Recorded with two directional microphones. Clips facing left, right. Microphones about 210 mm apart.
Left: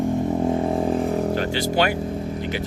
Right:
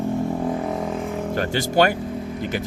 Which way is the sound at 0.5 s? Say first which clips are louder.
Left 4 dB; 30° left (ahead or behind).